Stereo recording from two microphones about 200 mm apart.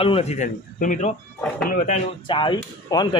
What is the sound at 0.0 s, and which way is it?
A man's voice, 30° left (ahead or behind).